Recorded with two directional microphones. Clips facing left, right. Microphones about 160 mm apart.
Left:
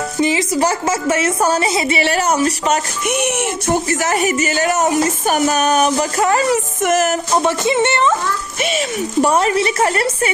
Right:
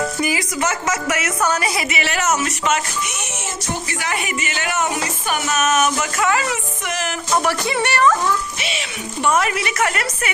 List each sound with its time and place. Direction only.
0.2 s speech: 25° left (ahead or behind)
3.1 s music: 60° left (ahead or behind)
3.8 s speech: 45° left (ahead or behind)
7.3 s speech: 20° left (ahead or behind)
9.2 s speech: 35° left (ahead or behind)